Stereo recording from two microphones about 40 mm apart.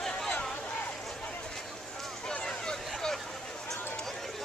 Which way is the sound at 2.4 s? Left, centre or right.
Centre.